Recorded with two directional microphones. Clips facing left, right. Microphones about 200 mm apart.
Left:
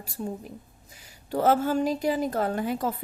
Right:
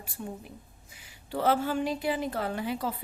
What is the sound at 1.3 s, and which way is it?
A woman's voice, 45° left (ahead or behind).